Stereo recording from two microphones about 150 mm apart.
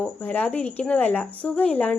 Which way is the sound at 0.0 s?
10° left (ahead or behind).